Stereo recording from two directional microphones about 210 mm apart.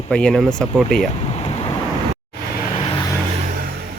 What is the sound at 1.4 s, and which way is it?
Vehicle, 30° left (ahead or behind).